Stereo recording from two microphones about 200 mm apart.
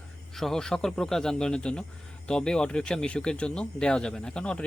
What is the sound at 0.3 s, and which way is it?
Speech, centre (ahead or behind).